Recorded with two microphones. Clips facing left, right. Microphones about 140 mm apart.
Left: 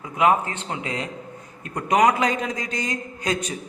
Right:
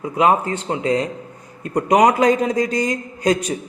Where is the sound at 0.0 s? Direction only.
35° right (ahead or behind).